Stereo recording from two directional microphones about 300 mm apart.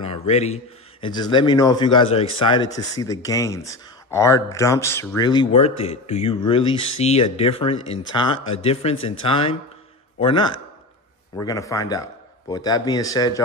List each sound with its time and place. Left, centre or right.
0.3 s speech: left